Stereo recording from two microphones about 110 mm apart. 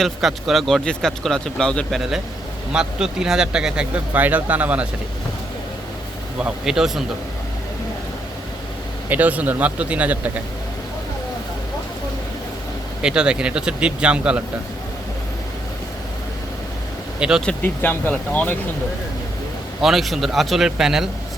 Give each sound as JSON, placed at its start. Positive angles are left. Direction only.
{"t": 0.0, "sound": "speech", "side_deg": 0}
{"t": 6.4, "sound": "speech", "side_deg": -5}
{"t": 9.0, "sound": "speech", "side_deg": -15}
{"t": 13.0, "sound": "speech", "side_deg": -10}
{"t": 17.2, "sound": "speech", "side_deg": -10}
{"t": 17.4, "sound": "speech", "side_deg": 15}
{"t": 19.8, "sound": "speech", "side_deg": 0}